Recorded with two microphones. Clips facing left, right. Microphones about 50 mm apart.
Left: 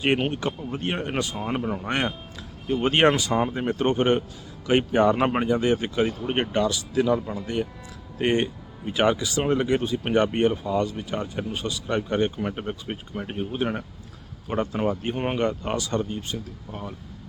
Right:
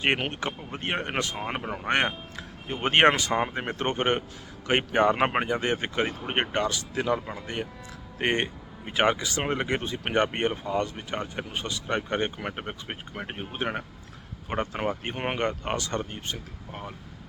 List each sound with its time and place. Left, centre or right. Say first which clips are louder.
0.3 s speech: left 4 dB; right